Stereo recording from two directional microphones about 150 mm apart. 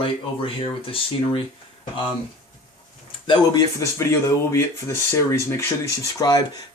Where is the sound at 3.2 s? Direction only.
30° left (ahead or behind).